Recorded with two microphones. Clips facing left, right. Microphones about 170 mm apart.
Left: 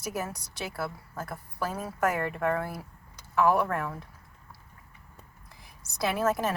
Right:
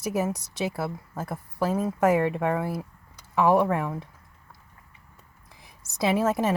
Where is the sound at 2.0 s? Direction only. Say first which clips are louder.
Right 5 dB; 10° right (ahead or behind).